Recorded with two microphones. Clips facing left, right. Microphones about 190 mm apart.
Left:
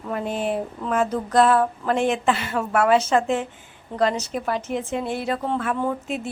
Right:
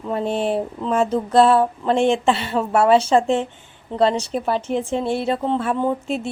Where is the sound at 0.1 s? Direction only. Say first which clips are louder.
Right 4 dB; 30° right (ahead or behind).